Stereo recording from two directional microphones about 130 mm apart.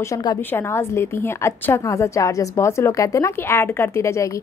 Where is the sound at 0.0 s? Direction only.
30° left (ahead or behind).